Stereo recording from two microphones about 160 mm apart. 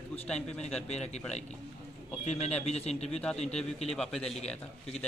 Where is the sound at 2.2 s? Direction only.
45° left (ahead or behind).